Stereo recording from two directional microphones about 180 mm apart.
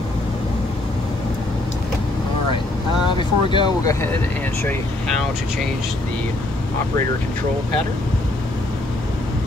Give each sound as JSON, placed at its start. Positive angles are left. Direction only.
{"t": 3.2, "sound": "vehicle", "side_deg": 25}